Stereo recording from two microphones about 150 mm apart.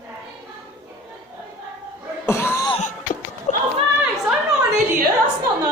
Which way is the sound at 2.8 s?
60° left (ahead or behind).